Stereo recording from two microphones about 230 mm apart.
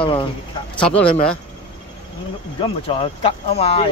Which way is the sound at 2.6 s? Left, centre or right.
Left.